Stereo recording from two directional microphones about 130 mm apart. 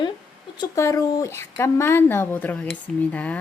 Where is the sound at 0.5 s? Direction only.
25° left (ahead or behind).